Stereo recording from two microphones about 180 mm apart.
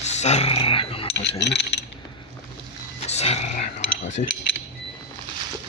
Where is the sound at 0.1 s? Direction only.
40° left (ahead or behind).